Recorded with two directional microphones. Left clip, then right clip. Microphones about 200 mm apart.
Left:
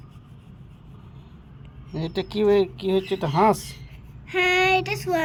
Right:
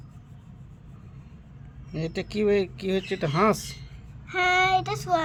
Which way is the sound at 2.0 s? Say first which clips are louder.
Left 3 dB; 45° right (ahead or behind).